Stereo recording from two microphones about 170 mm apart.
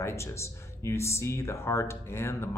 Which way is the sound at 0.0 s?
15° left (ahead or behind).